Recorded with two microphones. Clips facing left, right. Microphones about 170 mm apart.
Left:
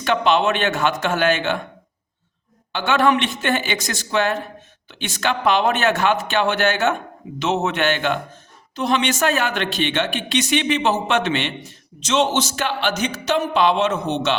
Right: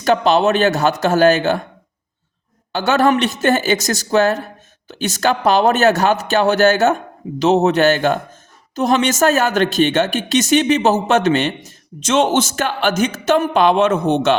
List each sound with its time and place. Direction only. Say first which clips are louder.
0.0 s speech: right 4 dB; 40° right (ahead or behind)
2.7 s speech: right 3 dB; 40° right (ahead or behind)